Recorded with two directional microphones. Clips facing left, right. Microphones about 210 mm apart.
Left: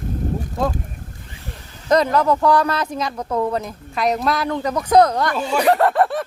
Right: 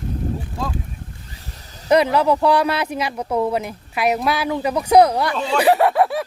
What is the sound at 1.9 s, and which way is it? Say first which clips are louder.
Speech: right 1 dB; 10° right (ahead or behind).